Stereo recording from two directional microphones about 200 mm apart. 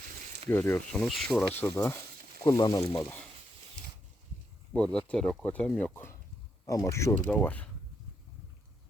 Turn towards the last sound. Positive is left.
turn(degrees=5)  # may be behind; listen again after turning